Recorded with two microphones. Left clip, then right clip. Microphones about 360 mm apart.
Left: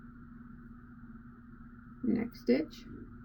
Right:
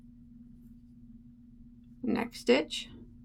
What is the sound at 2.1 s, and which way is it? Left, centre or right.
Speech, right.